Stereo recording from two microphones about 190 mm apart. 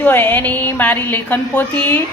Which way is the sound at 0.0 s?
10° left (ahead or behind).